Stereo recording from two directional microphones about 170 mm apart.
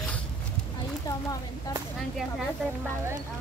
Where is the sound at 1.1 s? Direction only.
20° left (ahead or behind).